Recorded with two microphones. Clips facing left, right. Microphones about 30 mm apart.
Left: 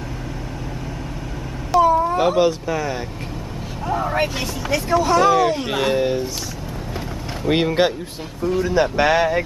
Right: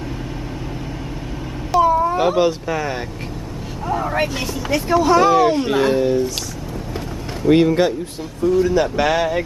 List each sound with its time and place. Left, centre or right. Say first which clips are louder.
1.7 s speech: even; centre
3.8 s speech: right 1 dB; centre
5.7 s speech: right 3 dB; centre
5.9 s speech: right 3 dB; left
7.4 s speech: right 4 dB; centre